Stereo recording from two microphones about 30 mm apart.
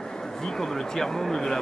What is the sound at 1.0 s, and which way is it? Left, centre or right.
Speech, centre.